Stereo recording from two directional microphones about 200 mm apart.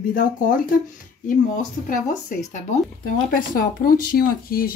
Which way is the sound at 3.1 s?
45° left (ahead or behind).